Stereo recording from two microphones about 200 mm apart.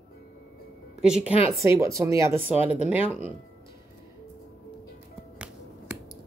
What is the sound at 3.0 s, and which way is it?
Speech, 30° left (ahead or behind).